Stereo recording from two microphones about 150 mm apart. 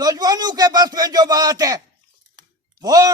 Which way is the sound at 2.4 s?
25° right (ahead or behind).